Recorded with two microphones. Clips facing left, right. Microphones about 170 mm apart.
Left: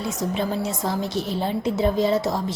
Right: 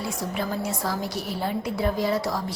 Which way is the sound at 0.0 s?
20° left (ahead or behind).